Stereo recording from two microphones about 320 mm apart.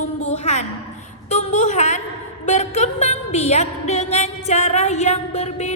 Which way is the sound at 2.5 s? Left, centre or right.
Left.